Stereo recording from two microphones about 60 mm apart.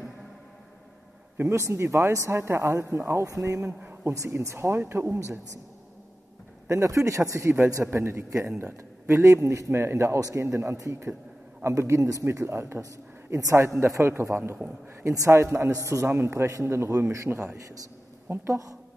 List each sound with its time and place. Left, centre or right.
1.5 s speech: right
6.7 s speech: right
7.8 s speech: right
10.2 s speech: right
13.3 s speech: right
15.4 s speech: right
18.5 s speech: right